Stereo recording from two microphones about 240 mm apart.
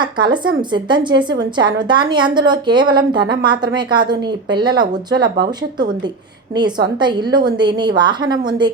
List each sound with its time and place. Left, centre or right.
0.0 s a woman's voice: centre
7.0 s a woman's voice: centre